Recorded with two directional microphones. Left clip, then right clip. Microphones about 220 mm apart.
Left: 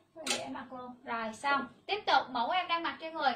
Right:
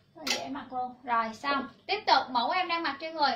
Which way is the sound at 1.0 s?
15° left (ahead or behind).